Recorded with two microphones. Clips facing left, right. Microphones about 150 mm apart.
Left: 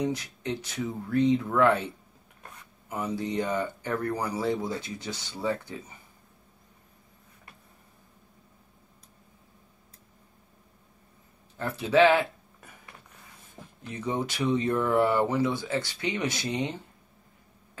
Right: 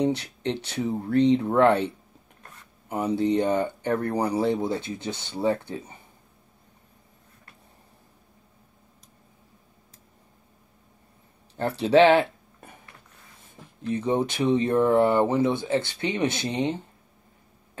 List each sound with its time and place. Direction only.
0.0 s speech: 30° right (ahead or behind)
3.2 s speech: 30° right (ahead or behind)
11.5 s speech: 30° right (ahead or behind)
13.9 s speech: 25° right (ahead or behind)